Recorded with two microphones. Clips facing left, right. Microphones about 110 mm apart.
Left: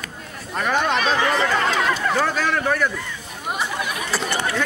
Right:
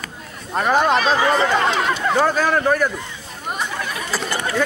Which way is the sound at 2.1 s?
40° right (ahead or behind).